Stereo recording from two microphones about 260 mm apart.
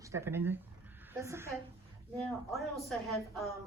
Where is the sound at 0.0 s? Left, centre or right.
Centre.